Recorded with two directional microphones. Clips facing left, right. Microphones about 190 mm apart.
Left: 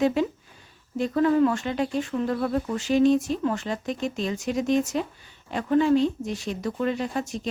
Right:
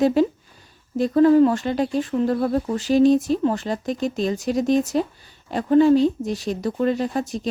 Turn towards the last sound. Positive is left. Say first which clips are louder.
# right 4 dB
turn(degrees=-35)  # may be behind; listen again after turning